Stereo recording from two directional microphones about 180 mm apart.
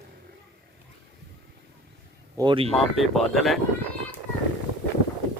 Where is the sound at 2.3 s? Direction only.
25° right (ahead or behind).